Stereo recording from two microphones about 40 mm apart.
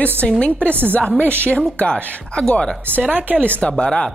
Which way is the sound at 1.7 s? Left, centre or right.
Left.